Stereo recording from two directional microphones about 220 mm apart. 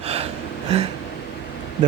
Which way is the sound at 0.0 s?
25° right (ahead or behind).